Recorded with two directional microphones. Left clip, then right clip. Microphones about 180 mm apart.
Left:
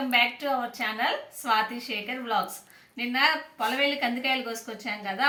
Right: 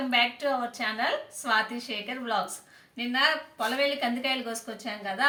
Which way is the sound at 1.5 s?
20° right (ahead or behind).